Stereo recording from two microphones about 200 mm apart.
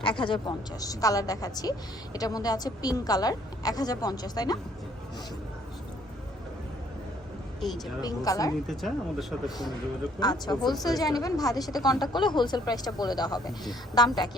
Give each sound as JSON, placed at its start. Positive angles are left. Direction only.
{"t": 0.0, "sound": "a woman's voice", "side_deg": 25}
{"t": 8.0, "sound": "speech", "side_deg": 15}
{"t": 8.6, "sound": "speech", "side_deg": 0}
{"t": 10.2, "sound": "a woman's voice", "side_deg": 20}